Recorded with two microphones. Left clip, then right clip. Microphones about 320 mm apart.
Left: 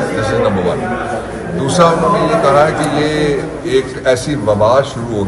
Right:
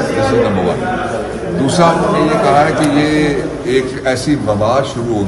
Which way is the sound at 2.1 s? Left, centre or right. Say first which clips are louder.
Even; centre.